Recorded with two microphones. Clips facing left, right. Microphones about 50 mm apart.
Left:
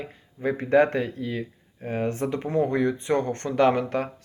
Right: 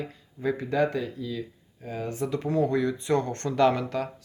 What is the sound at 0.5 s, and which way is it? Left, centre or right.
Speech, left.